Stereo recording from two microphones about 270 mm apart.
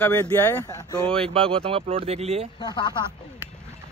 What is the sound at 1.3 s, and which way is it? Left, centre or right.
Speech, centre.